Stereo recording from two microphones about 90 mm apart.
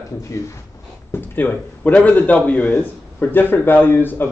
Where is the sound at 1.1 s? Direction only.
20° left (ahead or behind).